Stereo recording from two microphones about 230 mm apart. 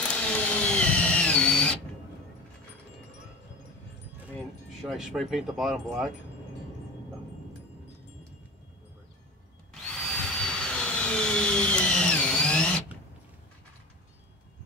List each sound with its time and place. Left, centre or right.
0.1 s printer: centre
4.4 s speech: centre
10.0 s a sound: centre